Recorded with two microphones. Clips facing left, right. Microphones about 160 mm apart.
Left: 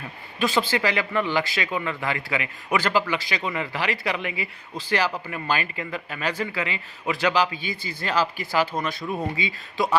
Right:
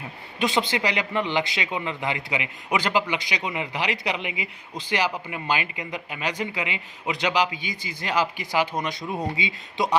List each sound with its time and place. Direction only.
0.3 s a man's voice: 20° right (ahead or behind)